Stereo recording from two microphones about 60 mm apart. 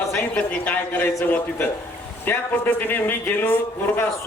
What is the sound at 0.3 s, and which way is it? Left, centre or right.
A man's voice, left.